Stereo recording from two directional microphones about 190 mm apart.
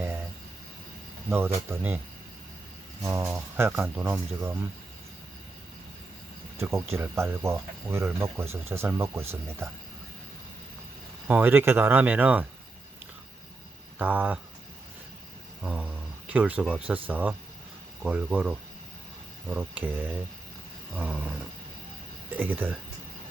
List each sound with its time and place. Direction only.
1.7 s speech: 10° right (ahead or behind)
3.0 s speech: 15° right (ahead or behind)
6.6 s speech: 15° right (ahead or behind)
11.3 s speech: 10° right (ahead or behind)
14.0 s speech: 10° right (ahead or behind)
15.6 s speech: 5° right (ahead or behind)